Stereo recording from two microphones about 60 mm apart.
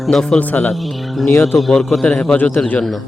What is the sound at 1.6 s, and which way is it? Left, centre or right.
Speech, centre.